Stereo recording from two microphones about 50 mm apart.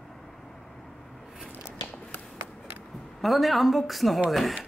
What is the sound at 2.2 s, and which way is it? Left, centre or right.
Run, centre.